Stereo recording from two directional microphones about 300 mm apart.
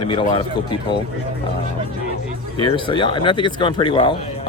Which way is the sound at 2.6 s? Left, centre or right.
Centre.